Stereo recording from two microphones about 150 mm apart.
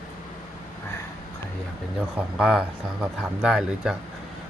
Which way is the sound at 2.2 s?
5° right (ahead or behind).